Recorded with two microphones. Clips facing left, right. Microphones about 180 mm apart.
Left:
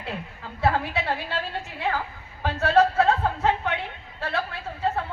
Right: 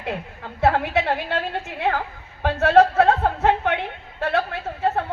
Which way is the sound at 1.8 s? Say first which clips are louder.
Right 4 dB; 60° right (ahead or behind).